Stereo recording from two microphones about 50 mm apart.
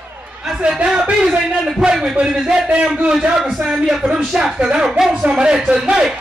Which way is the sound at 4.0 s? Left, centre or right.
Centre.